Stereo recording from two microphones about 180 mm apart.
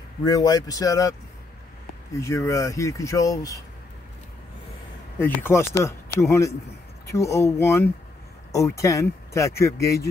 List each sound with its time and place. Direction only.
0.2 s a man's voice: 20° left (ahead or behind)
2.1 s speech: 15° left (ahead or behind)
5.2 s speech: 15° left (ahead or behind)
7.1 s speech: 15° left (ahead or behind)